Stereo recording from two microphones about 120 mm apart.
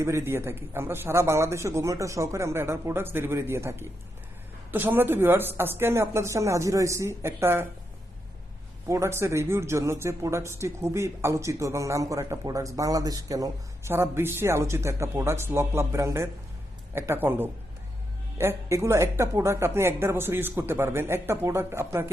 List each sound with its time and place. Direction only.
0.0 s speech: 20° right (ahead or behind)
8.9 s speech: 25° right (ahead or behind)